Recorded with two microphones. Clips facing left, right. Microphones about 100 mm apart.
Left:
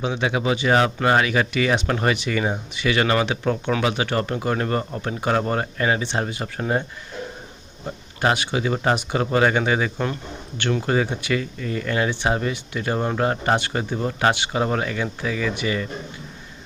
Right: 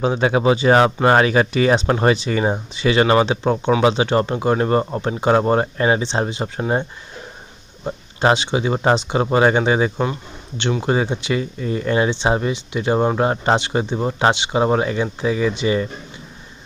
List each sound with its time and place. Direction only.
0.0 s speech: 40° right (ahead or behind); by 6.8 s 25° right (ahead or behind)
7.9 s speech: 25° right (ahead or behind)